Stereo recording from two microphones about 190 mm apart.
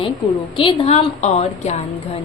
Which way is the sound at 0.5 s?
30° left (ahead or behind).